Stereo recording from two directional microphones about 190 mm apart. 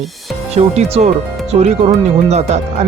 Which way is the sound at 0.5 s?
35° right (ahead or behind).